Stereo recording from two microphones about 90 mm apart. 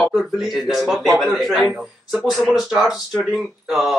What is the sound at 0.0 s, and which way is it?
Speech, 5° right (ahead or behind).